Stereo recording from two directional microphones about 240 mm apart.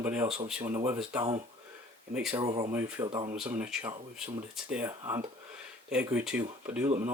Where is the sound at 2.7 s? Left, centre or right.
Centre.